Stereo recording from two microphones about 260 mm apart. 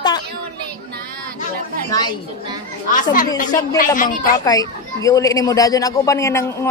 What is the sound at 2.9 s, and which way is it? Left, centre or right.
Speech, left.